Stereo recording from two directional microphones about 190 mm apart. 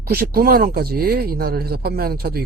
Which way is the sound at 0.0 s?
55° right (ahead or behind).